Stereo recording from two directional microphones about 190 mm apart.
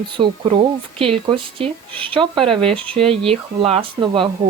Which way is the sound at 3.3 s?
30° right (ahead or behind).